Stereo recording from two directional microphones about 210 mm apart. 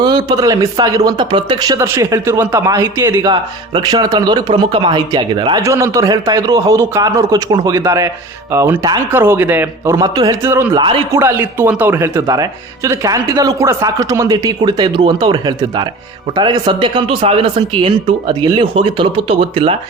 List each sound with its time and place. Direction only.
0.0 s speech: 20° right (ahead or behind)
10.8 s speech: 25° right (ahead or behind)
11.2 s speech: 10° right (ahead or behind)